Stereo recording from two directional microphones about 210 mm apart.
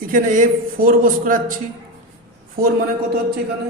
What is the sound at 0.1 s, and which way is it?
Speech, 40° right (ahead or behind).